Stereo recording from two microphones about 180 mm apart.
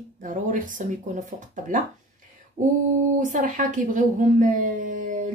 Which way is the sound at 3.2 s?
45° right (ahead or behind).